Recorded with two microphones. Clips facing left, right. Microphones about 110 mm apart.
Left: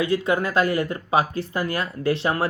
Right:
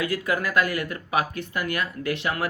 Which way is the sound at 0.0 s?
25° left (ahead or behind).